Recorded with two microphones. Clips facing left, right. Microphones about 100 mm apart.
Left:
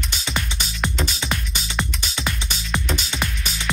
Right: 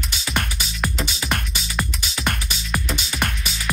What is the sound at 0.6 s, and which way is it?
Music, 5° right (ahead or behind).